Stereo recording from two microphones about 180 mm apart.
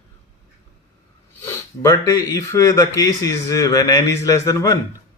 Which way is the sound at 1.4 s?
15° left (ahead or behind).